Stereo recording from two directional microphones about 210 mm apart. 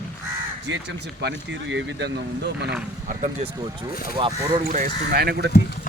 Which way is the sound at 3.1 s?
30° right (ahead or behind).